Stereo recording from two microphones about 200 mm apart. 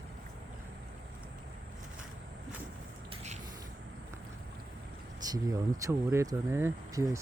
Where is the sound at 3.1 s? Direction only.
35° right (ahead or behind).